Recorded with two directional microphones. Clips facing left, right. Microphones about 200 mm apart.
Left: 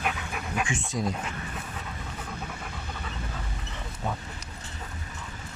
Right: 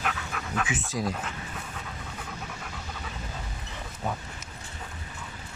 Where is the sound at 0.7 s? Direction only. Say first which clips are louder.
Even; centre (ahead or behind).